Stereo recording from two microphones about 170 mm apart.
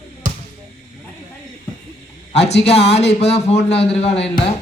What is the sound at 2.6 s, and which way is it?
A man's voice, 40° left (ahead or behind).